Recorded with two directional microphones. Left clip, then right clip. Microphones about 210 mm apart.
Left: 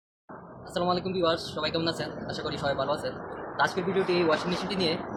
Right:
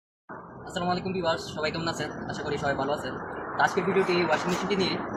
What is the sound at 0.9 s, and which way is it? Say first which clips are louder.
Speech: left 1 dB; 20° left (ahead or behind).